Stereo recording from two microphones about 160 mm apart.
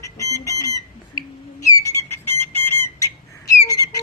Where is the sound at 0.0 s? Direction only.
20° left (ahead or behind).